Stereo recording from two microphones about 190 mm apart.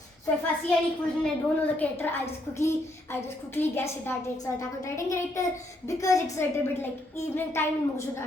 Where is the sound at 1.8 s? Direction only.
10° left (ahead or behind).